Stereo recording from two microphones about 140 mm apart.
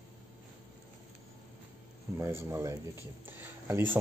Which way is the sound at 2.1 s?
20° right (ahead or behind).